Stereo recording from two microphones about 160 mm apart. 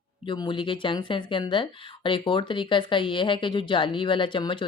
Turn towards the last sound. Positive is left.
turn(degrees=30)  # may be behind; listen again after turning